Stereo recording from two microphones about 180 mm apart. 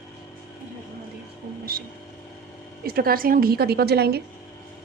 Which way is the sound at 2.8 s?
55° right (ahead or behind).